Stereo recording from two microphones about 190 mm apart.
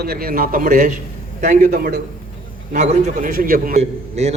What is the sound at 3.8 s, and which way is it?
Speech, 35° right (ahead or behind).